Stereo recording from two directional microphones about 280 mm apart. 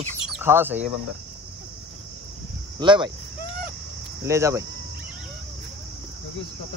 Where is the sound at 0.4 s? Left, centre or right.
Centre.